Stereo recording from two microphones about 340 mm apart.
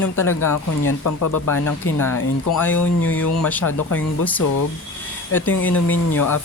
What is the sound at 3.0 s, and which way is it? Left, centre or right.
Speech, left.